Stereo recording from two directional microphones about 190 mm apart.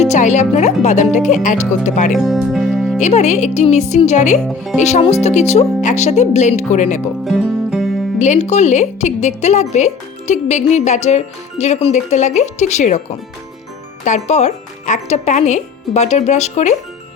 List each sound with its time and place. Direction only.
0.0 s a woman's voice: 40° left (ahead or behind)
2.1 s speech: centre (ahead or behind)
3.0 s a woman's voice: 35° left (ahead or behind)
4.4 s speech: centre (ahead or behind)
4.8 s a woman's voice: 35° left (ahead or behind)
7.3 s music: centre (ahead or behind)
8.2 s a woman's voice: 35° left (ahead or behind)